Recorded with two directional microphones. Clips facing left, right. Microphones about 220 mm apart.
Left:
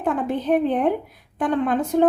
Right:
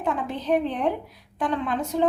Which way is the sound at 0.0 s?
50° left (ahead or behind).